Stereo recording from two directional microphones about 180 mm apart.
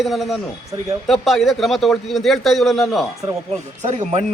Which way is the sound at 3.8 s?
40° right (ahead or behind).